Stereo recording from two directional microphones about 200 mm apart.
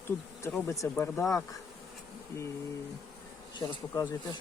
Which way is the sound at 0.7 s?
15° left (ahead or behind).